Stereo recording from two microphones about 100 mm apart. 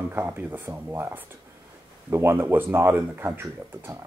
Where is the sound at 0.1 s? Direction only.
20° right (ahead or behind).